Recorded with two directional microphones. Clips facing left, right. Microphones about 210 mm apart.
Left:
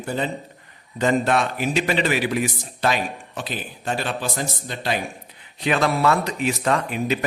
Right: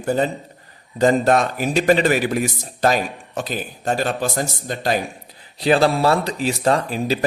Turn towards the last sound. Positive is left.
turn(degrees=-35)  # may be behind; listen again after turning